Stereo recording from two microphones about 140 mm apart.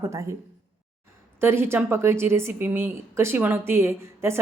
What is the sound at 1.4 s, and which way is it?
A woman's voice, 15° right (ahead or behind).